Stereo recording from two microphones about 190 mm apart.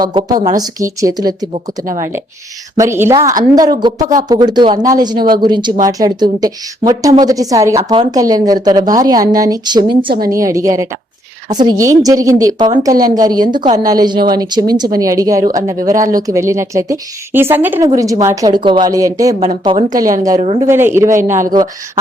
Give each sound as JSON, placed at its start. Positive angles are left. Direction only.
{"t": 0.1, "sound": "a woman's voice", "side_deg": -25}
{"t": 2.7, "sound": "a woman's voice", "side_deg": -15}